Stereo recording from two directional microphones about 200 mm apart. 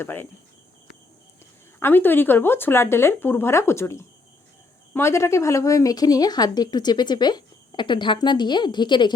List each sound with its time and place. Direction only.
0.0 s speech: 10° left (ahead or behind)
1.8 s a woman's voice: 10° left (ahead or behind)